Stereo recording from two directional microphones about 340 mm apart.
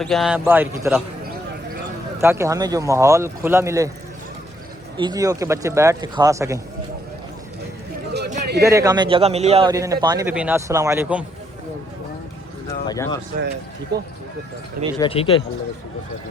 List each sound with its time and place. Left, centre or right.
0.0 s a man's voice: centre
2.2 s a man's voice: centre
4.9 s a man's voice: centre
8.1 s a sound: right
8.6 s a man's voice: centre
12.9 s speech: centre
13.9 s speech: right
14.9 s speech: centre